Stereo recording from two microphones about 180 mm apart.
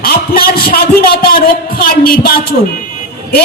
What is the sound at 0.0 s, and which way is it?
A man's voice, 55° left (ahead or behind).